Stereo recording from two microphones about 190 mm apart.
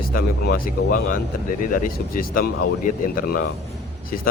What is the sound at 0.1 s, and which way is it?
Speech, 50° left (ahead or behind).